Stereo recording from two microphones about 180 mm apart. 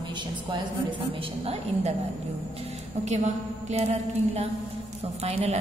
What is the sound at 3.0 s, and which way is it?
Speech, 40° right (ahead or behind).